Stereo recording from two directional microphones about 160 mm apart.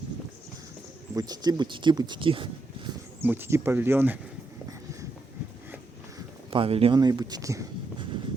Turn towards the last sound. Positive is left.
turn(degrees=-20)  # may be behind; listen again after turning